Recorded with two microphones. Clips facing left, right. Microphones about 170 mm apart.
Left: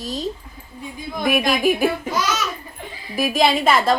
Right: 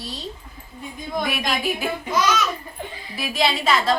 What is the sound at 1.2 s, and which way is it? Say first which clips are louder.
Speech: left 10 dB; 50° left (ahead or behind).